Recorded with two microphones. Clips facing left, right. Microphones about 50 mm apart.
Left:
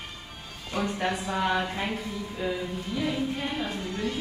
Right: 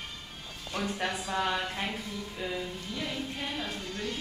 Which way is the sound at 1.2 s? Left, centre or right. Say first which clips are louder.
Left 3 dB; centre.